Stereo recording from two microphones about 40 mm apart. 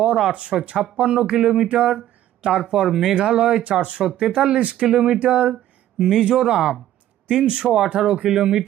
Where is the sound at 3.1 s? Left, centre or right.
Right.